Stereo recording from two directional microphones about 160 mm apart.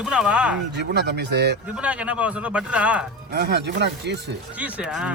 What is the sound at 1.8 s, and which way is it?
Speech, 5° right (ahead or behind).